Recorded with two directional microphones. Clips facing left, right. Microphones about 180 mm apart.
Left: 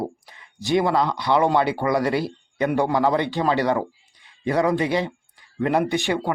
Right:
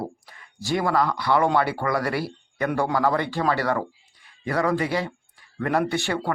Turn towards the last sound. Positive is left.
turn(degrees=15)  # may be behind; listen again after turning